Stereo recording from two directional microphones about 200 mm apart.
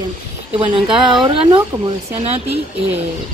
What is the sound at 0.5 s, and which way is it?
Speech, 25° right (ahead or behind).